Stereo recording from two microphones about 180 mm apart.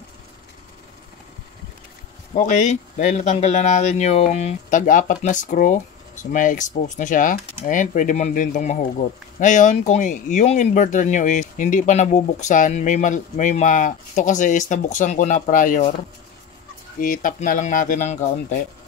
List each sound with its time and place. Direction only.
2.3 s speech: 40° left (ahead or behind)
17.0 s speech: 50° left (ahead or behind)